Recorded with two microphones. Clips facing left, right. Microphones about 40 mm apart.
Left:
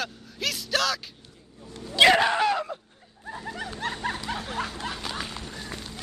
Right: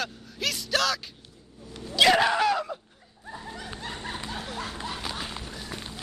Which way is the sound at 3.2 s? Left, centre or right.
Left.